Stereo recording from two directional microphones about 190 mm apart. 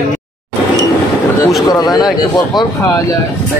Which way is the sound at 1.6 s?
20° left (ahead or behind).